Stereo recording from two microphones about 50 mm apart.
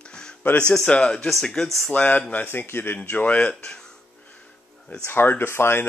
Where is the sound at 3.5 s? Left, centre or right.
Centre.